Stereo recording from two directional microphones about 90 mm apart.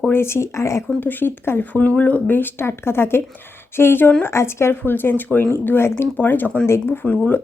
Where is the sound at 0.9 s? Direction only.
20° left (ahead or behind).